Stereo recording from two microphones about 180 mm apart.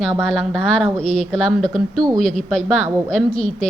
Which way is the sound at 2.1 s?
45° right (ahead or behind).